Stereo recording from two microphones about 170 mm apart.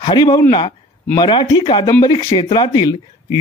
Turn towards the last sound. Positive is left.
turn(degrees=25)  # may be behind; listen again after turning